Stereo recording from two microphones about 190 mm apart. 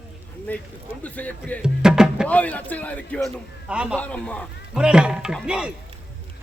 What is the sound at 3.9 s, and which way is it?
A man's voice, 5° left (ahead or behind).